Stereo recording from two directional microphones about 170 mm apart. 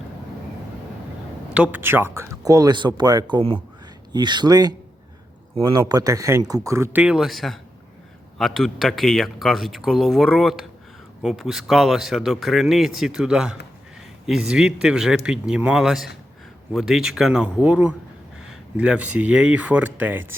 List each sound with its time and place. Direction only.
1.5 s speech: 10° right (ahead or behind)